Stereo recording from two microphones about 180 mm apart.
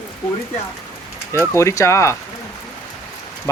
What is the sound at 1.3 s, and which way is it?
Speech, 15° left (ahead or behind).